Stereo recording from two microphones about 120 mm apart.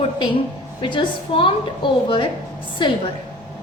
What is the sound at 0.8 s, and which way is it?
A woman's voice, 45° left (ahead or behind).